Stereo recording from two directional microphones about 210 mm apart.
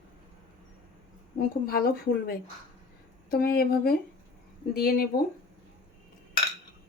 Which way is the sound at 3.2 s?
45° left (ahead or behind).